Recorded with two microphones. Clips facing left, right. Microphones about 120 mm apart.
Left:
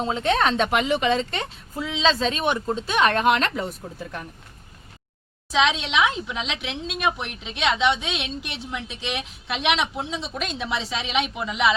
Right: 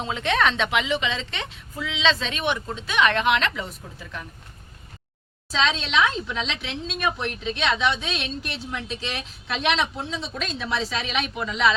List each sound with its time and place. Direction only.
0.0 s a woman's voice: 35° left (ahead or behind)
5.5 s a woman's voice: 15° left (ahead or behind)